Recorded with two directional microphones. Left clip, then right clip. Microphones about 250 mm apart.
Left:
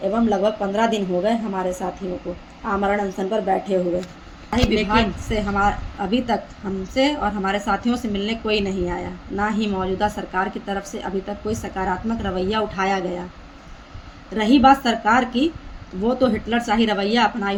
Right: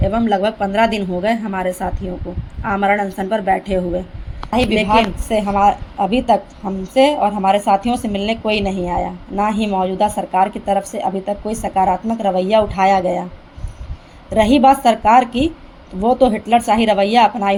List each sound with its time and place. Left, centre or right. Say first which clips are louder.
0.3 s a woman's voice: right 3 dB; right
14.3 s a woman's voice: right 4 dB; right